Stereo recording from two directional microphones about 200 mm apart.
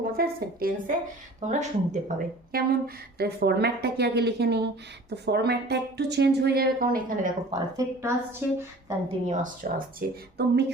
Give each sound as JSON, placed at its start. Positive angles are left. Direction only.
{"t": 0.0, "sound": "speech", "side_deg": -50}
{"t": 1.4, "sound": "a woman's voice", "side_deg": -35}
{"t": 7.8, "sound": "a woman's voice", "side_deg": -10}
{"t": 9.2, "sound": "speech", "side_deg": -40}
{"t": 10.3, "sound": "speech", "side_deg": -55}